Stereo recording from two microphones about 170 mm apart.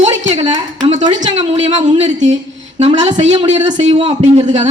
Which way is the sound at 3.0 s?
40° right (ahead or behind).